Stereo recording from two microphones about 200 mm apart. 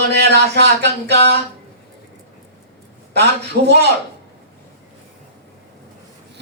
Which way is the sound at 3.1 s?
55° right (ahead or behind).